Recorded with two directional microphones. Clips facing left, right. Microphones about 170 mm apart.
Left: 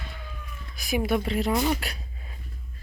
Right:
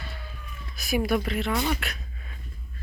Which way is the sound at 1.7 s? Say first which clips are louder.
Even; 35° left (ahead or behind).